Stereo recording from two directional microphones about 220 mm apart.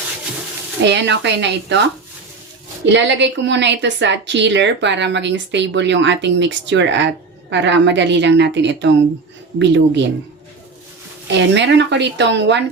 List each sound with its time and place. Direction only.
0.9 s a woman's voice: 50° right (ahead or behind)
2.9 s a woman's voice: 55° right (ahead or behind)
11.3 s a woman's voice: 55° right (ahead or behind)